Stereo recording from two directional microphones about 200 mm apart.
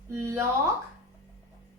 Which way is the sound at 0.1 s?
15° right (ahead or behind).